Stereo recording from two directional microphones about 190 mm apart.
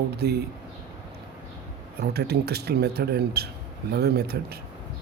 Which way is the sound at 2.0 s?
55° right (ahead or behind).